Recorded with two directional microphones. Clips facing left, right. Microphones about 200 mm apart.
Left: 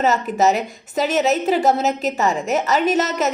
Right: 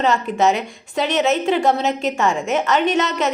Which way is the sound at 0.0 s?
5° left (ahead or behind).